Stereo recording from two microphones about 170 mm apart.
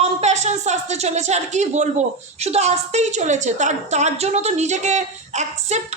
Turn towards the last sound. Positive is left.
turn(degrees=-40)  # may be behind; listen again after turning